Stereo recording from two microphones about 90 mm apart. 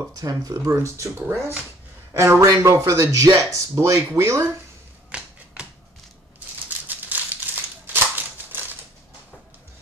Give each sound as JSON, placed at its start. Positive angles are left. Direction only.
{"t": 0.1, "sound": "speech", "side_deg": -40}
{"t": 2.1, "sound": "speech", "side_deg": -30}
{"t": 5.1, "sound": "finger snapping", "side_deg": -15}
{"t": 6.9, "sound": "scissors", "side_deg": -20}